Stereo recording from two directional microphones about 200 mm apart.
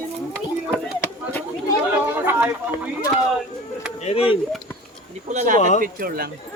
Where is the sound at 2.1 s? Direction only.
10° right (ahead or behind).